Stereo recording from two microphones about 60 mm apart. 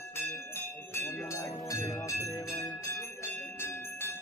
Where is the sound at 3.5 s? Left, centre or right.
Left.